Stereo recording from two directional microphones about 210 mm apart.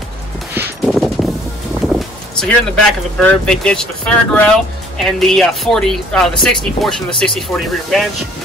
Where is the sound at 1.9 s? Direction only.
5° left (ahead or behind).